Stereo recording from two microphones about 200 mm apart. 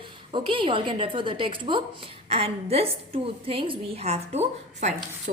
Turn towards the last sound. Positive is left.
turn(degrees=-35)  # may be behind; listen again after turning